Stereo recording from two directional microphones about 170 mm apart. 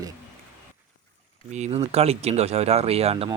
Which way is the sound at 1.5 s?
40° right (ahead or behind).